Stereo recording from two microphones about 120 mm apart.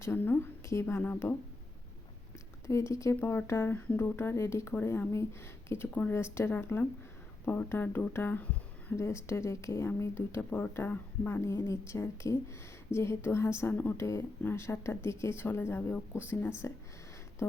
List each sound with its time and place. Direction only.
0.0 s speech: 20° left (ahead or behind)
2.6 s speech: 25° left (ahead or behind)